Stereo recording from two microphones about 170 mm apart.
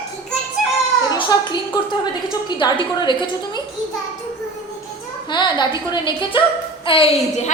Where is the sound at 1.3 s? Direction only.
25° left (ahead or behind).